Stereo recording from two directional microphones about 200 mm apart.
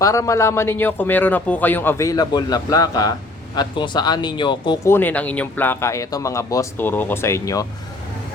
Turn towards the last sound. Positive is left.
turn(degrees=15)  # may be behind; listen again after turning